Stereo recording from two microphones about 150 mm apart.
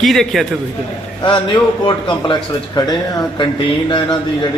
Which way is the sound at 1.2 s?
30° left (ahead or behind).